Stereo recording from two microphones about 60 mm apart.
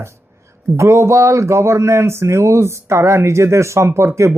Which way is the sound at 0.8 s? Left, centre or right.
Right.